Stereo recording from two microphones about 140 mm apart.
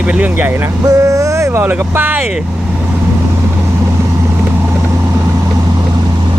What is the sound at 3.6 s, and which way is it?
Vehicle, 20° right (ahead or behind).